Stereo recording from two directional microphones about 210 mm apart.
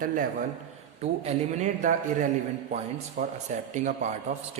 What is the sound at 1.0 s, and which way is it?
A man's voice, 35° right (ahead or behind).